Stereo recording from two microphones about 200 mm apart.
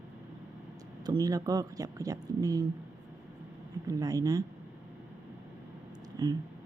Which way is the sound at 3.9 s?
15° right (ahead or behind).